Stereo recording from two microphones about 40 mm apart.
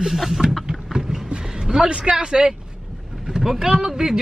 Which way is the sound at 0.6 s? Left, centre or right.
Centre.